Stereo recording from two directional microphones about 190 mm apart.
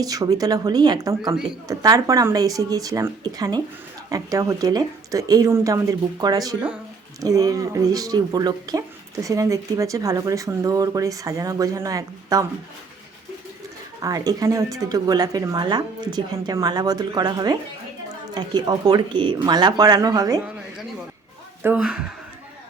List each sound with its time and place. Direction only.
0.0 s a woman's voice: 20° right (ahead or behind)
14.0 s a woman's voice: 20° right (ahead or behind)
21.6 s speech: 10° right (ahead or behind)